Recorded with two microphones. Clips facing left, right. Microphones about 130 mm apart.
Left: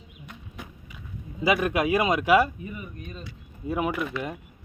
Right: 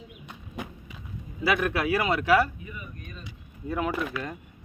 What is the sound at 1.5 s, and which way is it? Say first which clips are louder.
Speech: left 2 dB; 15° left (ahead or behind).